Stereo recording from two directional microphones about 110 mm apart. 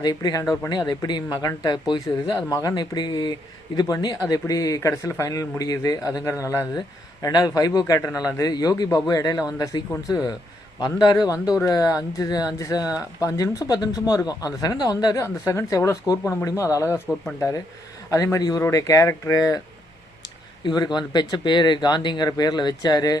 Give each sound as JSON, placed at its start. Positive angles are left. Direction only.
{"t": 0.0, "sound": "speech", "side_deg": 35}
{"t": 10.8, "sound": "speech", "side_deg": 40}
{"t": 18.1, "sound": "speech", "side_deg": 30}
{"t": 20.7, "sound": "speech", "side_deg": 40}